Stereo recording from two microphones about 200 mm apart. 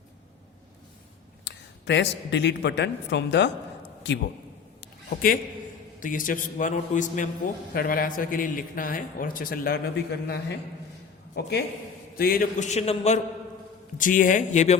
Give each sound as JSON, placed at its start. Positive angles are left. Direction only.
{"t": 1.5, "sound": "speech", "side_deg": 60}
{"t": 4.8, "sound": "a sound", "side_deg": 45}
{"t": 6.0, "sound": "a man's voice", "side_deg": 40}